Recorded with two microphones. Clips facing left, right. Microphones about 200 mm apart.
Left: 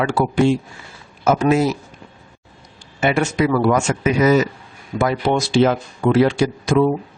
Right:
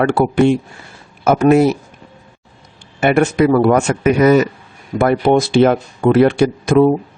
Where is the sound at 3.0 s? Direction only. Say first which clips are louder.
Right 5 dB; 55° right (ahead or behind).